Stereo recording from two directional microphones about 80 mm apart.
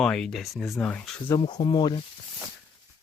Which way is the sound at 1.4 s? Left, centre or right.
Left.